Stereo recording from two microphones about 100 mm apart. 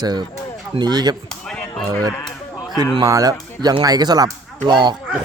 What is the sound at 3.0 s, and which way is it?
Speech, 35° right (ahead or behind).